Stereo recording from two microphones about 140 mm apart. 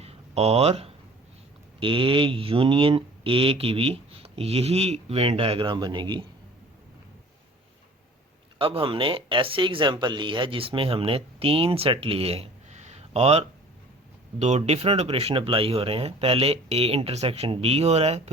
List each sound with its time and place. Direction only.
0.0 s a sound: 45° right (ahead or behind)
1.8 s speech: 40° right (ahead or behind)
8.5 s speech: 40° right (ahead or behind)